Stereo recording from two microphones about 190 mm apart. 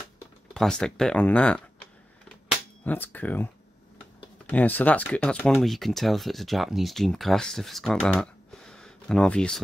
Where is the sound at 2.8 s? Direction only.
10° left (ahead or behind).